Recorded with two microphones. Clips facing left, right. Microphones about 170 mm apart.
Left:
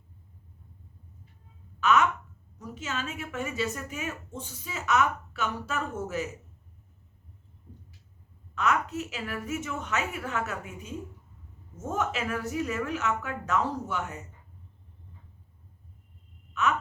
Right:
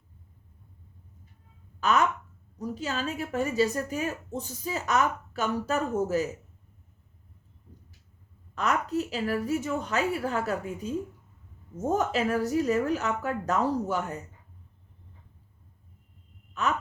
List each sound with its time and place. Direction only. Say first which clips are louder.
1.8 s a woman's voice: left 1 dB; 35° right (ahead or behind)
8.5 s a woman's voice: right 1 dB; 35° right (ahead or behind)
16.6 s a woman's voice: left 1 dB; 35° right (ahead or behind)